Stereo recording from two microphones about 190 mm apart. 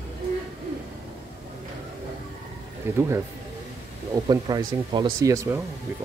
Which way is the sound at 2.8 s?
10° right (ahead or behind).